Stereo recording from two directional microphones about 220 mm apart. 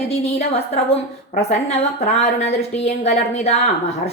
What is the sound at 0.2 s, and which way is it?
A woman's voice, 30° left (ahead or behind).